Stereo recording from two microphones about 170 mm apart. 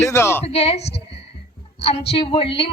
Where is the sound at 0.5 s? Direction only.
35° left (ahead or behind).